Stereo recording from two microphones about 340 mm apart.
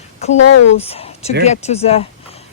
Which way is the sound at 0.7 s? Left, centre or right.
Centre.